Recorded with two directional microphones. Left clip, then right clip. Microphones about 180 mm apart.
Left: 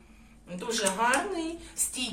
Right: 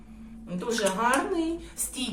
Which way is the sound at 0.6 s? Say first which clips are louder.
Right 2 dB; 10° left (ahead or behind).